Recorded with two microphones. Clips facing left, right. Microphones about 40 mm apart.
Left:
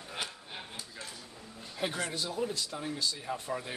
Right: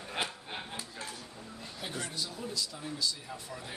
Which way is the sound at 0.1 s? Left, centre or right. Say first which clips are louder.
Right 4 dB; right.